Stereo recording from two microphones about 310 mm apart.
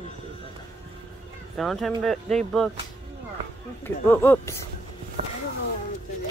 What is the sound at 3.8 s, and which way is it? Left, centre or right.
Speech, centre.